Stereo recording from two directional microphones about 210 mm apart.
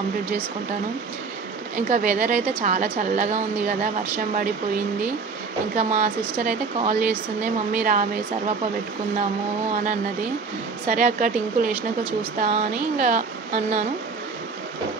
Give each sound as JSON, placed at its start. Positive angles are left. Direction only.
{"t": 1.9, "sound": "a woman's voice", "side_deg": -35}
{"t": 5.8, "sound": "a woman's voice", "side_deg": -35}
{"t": 10.9, "sound": "a woman's voice", "side_deg": -40}
{"t": 11.7, "sound": "speech", "side_deg": -10}
{"t": 12.4, "sound": "a woman's voice", "side_deg": -35}